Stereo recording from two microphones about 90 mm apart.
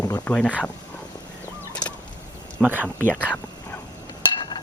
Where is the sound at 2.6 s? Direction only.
20° right (ahead or behind).